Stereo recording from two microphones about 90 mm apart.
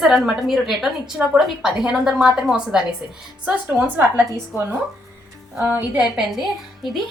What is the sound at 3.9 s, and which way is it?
A woman's voice, 25° right (ahead or behind).